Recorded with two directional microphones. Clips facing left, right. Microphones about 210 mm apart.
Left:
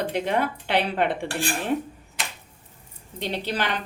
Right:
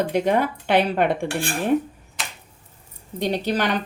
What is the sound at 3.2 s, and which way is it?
Speech, 45° right (ahead or behind).